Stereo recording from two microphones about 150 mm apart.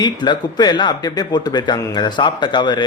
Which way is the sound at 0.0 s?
30° left (ahead or behind).